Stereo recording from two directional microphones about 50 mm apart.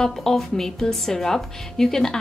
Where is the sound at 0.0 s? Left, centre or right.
Centre.